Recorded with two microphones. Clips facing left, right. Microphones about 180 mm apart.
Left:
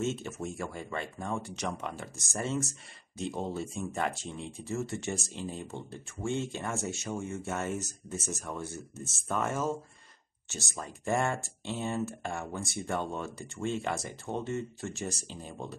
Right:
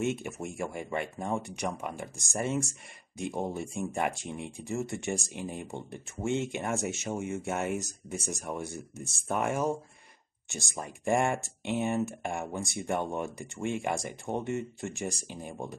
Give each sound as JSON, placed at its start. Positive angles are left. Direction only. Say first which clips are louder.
{"t": 0.0, "sound": "speech", "louder": "right 1 dB", "side_deg": -15}